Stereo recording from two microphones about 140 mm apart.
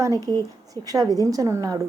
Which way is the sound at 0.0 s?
25° right (ahead or behind).